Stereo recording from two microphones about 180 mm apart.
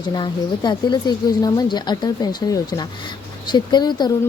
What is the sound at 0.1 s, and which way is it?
Speech, 25° left (ahead or behind).